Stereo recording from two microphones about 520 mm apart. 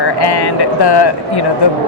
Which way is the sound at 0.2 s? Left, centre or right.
Left.